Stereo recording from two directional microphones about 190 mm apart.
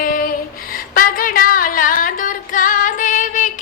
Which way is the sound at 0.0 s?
50° left (ahead or behind).